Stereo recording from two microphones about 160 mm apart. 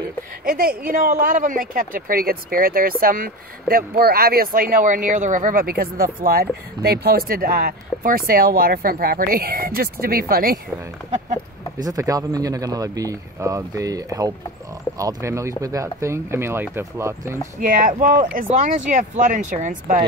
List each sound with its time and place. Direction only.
0.5 s speech: 65° right (ahead or behind)
11.1 s speech: 50° right (ahead or behind)
11.8 s speech: 20° right (ahead or behind)
17.6 s speech: 55° right (ahead or behind)